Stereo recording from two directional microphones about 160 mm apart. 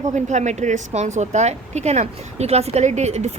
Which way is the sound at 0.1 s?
45° right (ahead or behind).